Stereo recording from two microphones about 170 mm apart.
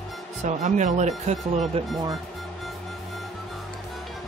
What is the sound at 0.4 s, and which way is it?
Speech, 40° right (ahead or behind).